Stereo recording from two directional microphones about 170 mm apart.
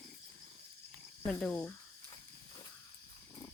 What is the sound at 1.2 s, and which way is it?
Speech, 5° left (ahead or behind).